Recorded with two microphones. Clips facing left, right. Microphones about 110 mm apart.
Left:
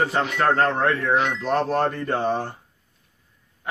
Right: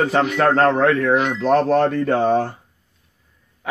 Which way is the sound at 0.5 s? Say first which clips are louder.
Right 5 dB; 90° right.